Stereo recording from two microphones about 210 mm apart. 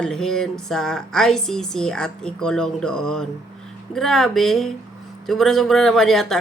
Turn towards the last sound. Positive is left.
turn(degrees=0)  # may be behind; listen again after turning